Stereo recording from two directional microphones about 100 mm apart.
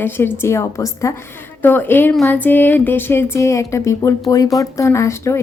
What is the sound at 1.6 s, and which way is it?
A woman's voice, 20° left (ahead or behind).